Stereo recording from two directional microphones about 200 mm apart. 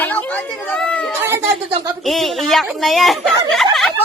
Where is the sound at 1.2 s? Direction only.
10° right (ahead or behind).